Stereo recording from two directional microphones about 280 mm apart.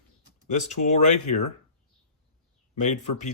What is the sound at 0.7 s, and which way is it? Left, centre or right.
Speech, left.